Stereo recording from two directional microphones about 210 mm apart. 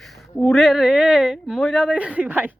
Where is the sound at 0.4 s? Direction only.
Centre (ahead or behind).